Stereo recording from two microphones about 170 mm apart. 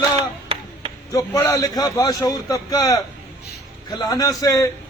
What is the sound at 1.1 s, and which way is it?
A man's voice, 20° left (ahead or behind).